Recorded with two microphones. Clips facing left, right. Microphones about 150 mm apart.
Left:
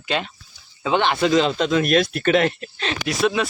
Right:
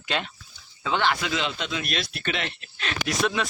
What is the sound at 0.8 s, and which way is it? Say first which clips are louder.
Speech: left 5 dB; 20° left (ahead or behind).